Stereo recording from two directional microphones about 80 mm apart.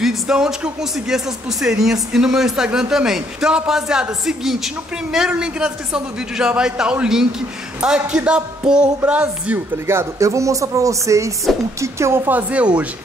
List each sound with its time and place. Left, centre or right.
0.0 s speech: centre
9.8 s speech: right
12.3 s speech: centre